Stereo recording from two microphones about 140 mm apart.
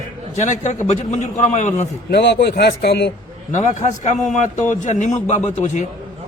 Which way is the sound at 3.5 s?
60° left (ahead or behind).